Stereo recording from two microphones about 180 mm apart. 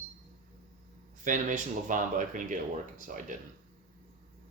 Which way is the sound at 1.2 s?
45° right (ahead or behind).